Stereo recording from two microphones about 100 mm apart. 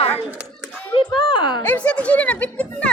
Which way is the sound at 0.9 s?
55° left (ahead or behind).